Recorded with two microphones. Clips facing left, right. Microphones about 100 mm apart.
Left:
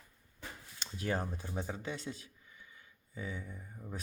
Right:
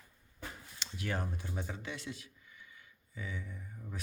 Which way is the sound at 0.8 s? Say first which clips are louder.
Left 3 dB; 35° left (ahead or behind).